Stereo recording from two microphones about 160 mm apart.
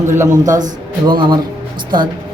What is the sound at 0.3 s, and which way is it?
Speech, 50° right (ahead or behind).